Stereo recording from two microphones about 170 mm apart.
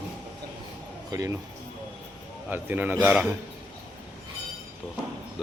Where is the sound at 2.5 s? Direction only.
10° right (ahead or behind).